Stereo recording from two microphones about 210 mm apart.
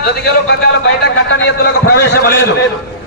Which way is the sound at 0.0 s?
55° left (ahead or behind).